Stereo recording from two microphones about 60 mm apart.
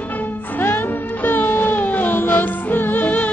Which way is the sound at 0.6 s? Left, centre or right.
Left.